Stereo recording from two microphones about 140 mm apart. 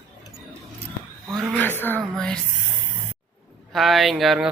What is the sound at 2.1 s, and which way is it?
Speech, 5° left (ahead or behind).